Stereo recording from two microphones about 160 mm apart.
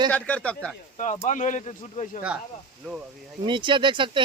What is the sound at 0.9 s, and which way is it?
Speech, 50° left (ahead or behind).